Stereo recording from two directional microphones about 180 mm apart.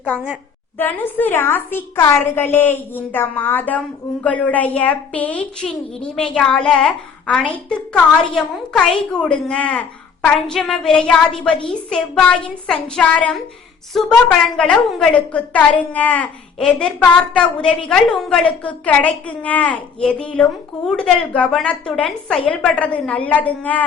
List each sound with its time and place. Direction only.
0.8 s a woman's voice: 10° left (ahead or behind)